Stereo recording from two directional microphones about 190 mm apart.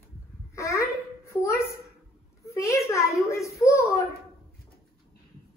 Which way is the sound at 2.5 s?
15° left (ahead or behind).